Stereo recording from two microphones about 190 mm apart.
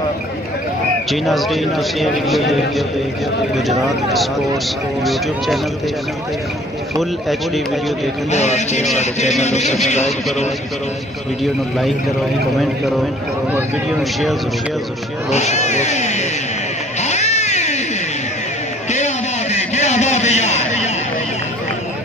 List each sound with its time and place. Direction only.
1.1 s a man's voice: centre (ahead or behind)
7.0 s a man's voice: centre (ahead or behind)
8.3 s speech: 35° left (ahead or behind)
12.5 s a man's voice: centre (ahead or behind)
15.3 s speech: 35° left (ahead or behind)
17.0 s cat: 35° left (ahead or behind)
18.9 s a sound: 35° left (ahead or behind)